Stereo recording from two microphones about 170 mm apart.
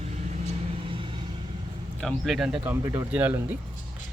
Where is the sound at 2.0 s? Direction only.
Centre (ahead or behind).